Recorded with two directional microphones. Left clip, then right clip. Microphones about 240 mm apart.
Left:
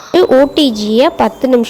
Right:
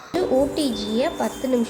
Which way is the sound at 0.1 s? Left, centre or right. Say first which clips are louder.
Left 12 dB; left.